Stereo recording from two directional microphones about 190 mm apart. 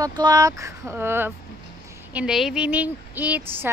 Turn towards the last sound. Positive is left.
turn(degrees=-10)  # may be behind; listen again after turning